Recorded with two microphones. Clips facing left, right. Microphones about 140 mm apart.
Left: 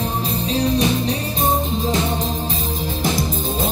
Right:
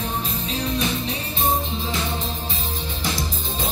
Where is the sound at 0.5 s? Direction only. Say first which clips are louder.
Left 7 dB; 35° left (ahead or behind).